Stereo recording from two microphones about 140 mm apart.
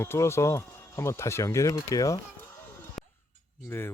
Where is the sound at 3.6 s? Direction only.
20° left (ahead or behind).